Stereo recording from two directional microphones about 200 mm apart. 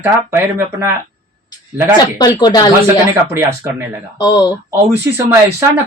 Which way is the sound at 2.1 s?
20° left (ahead or behind).